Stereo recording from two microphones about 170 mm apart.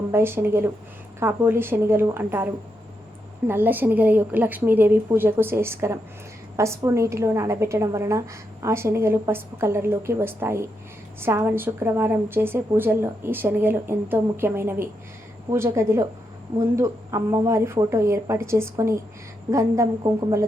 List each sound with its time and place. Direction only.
0.1 s a woman's voice: 15° right (ahead or behind)